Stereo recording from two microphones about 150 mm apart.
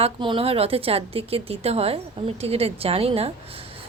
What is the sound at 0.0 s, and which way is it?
A woman's voice, 35° right (ahead or behind).